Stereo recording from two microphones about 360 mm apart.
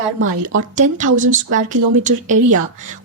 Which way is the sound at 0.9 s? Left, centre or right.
Right.